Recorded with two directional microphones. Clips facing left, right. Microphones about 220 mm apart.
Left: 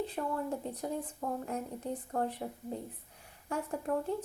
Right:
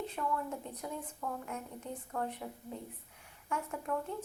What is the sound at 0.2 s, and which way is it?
Speech, 35° left (ahead or behind).